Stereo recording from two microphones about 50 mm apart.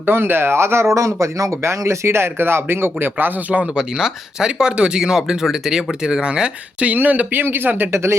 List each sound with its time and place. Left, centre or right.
0.0 s speech: right
3.8 s speech: centre
6.8 s speech: right